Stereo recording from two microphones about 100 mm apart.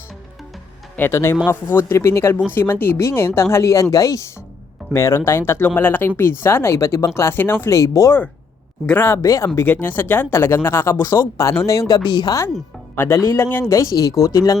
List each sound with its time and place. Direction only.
0.9 s speech: 25° left (ahead or behind)
7.8 s speech: 35° left (ahead or behind)
8.9 s speech: 20° left (ahead or behind)
9.2 s speech: 35° left (ahead or behind)
9.6 s speech: 20° left (ahead or behind); by 12.4 s 45° left (ahead or behind)
13.1 s speech: 35° left (ahead or behind)